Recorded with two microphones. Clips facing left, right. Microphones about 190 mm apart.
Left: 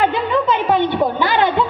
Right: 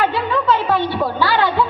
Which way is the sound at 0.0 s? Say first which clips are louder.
Left 2 dB; 20° left (ahead or behind).